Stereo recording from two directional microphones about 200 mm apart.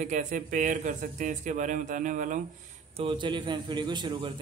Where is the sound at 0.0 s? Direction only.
40° right (ahead or behind).